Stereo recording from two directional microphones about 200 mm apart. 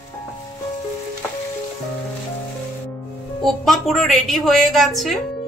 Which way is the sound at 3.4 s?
Centre (ahead or behind).